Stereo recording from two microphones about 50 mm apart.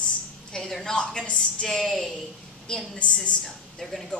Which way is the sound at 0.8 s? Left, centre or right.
Centre.